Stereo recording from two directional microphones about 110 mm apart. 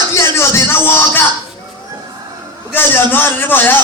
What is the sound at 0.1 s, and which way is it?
Music, 25° left (ahead or behind).